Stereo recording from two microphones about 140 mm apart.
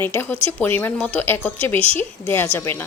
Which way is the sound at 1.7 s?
45° right (ahead or behind).